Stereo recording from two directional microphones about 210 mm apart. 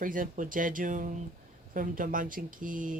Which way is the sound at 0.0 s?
40° right (ahead or behind).